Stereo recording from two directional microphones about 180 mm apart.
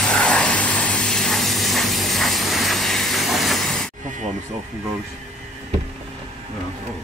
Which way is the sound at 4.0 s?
45° right (ahead or behind).